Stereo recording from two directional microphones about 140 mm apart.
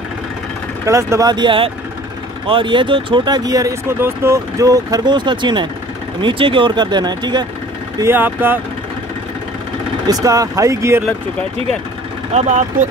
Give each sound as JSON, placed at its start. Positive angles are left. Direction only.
{"t": 0.8, "sound": "speech", "side_deg": -20}
{"t": 8.0, "sound": "speech", "side_deg": -15}
{"t": 10.0, "sound": "speech", "side_deg": -25}
{"t": 12.4, "sound": "speech", "side_deg": -55}